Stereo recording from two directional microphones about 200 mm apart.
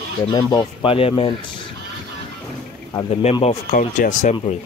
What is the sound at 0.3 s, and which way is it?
Speech, 20° left (ahead or behind).